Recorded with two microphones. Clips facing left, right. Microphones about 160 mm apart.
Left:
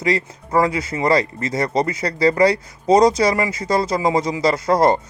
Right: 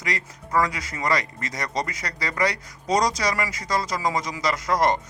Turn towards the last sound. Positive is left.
turn(degrees=30)  # may be behind; listen again after turning